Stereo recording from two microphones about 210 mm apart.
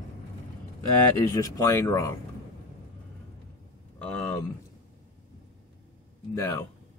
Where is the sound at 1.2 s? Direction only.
15° left (ahead or behind).